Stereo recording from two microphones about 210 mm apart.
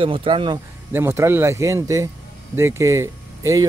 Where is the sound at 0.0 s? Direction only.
25° right (ahead or behind).